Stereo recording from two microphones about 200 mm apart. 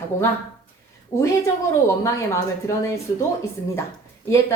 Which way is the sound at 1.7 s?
15° left (ahead or behind).